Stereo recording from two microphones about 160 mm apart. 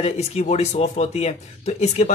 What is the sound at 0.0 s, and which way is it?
Speech, 45° left (ahead or behind).